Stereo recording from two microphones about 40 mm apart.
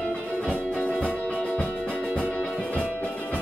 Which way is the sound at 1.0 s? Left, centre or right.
Left.